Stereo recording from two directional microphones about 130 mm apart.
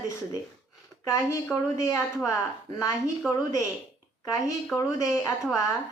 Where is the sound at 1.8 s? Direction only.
25° left (ahead or behind).